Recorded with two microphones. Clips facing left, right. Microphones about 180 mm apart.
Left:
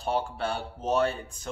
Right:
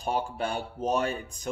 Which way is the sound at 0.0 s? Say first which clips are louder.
Left 1 dB; 15° right (ahead or behind).